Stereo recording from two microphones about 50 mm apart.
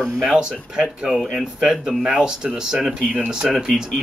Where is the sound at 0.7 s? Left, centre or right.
Centre.